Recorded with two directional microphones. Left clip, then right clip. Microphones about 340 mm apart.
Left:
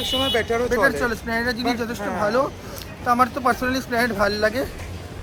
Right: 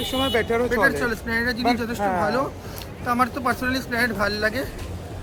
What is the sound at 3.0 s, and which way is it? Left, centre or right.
Speech, centre.